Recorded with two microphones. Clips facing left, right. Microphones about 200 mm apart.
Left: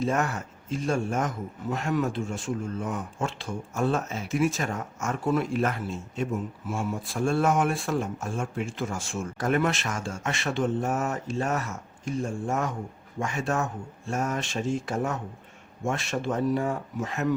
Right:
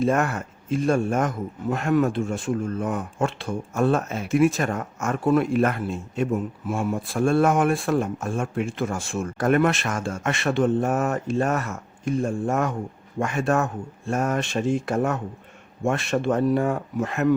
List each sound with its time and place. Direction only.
0.0 s speech: 55° right (ahead or behind)